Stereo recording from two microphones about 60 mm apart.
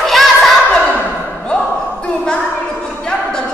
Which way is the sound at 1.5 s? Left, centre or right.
Centre.